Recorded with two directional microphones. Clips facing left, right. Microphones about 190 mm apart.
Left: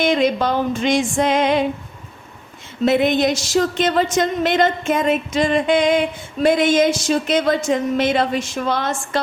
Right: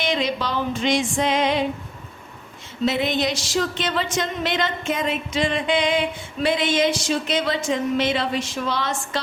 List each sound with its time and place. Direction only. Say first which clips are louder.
0.0 s speech: left 7 dB; 50° left (ahead or behind)
2.8 s speech: left 6 dB; 50° left (ahead or behind)